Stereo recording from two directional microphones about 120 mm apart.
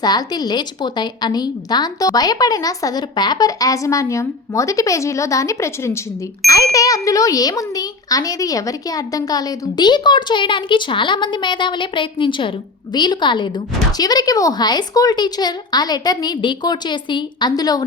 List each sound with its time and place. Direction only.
0.0 s a woman's voice: 35° left (ahead or behind)